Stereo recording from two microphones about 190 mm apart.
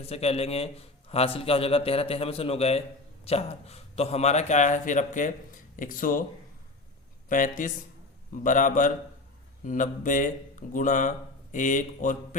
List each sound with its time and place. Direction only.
0.0 s a man's voice: 35° left (ahead or behind)
7.3 s a man's voice: 45° left (ahead or behind)